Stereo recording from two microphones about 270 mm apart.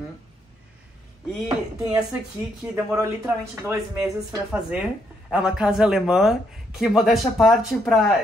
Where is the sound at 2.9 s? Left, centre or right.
Centre.